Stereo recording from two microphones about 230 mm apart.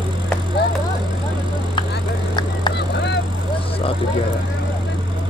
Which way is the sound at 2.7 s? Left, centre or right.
Left.